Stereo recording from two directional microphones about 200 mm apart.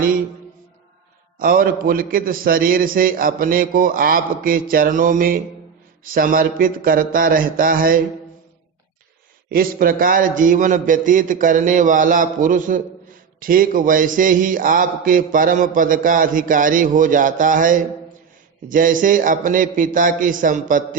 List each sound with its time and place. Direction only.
1.4 s speech: 45° right (ahead or behind)
9.5 s a man's voice: 45° right (ahead or behind)